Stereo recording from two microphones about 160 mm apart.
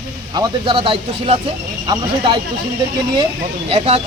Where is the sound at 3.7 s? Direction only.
40° right (ahead or behind).